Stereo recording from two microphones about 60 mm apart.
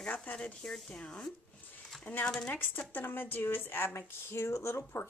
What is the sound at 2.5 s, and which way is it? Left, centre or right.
Speech, left.